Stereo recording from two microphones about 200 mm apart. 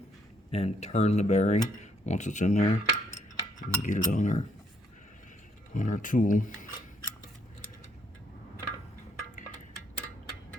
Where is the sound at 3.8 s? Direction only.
40° left (ahead or behind).